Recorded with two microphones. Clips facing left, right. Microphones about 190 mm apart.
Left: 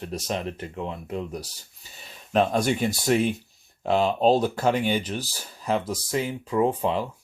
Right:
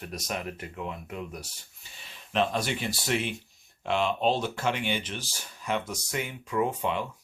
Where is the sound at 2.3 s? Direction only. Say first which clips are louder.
Left 6 dB; 45° left (ahead or behind).